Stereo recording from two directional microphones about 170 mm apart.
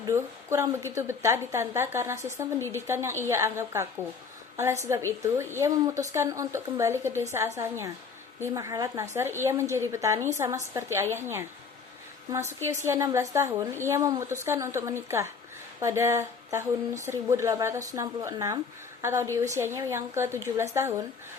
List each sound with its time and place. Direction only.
0.0 s a woman's voice: 15° right (ahead or behind)